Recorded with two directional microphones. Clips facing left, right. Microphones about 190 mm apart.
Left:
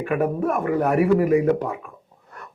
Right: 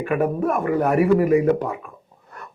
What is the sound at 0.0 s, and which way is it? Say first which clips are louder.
A man's voice: right 1 dB; 15° right (ahead or behind).